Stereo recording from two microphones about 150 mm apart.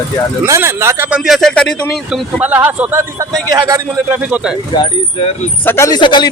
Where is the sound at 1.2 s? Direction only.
Centre (ahead or behind); by 3.8 s 25° right (ahead or behind).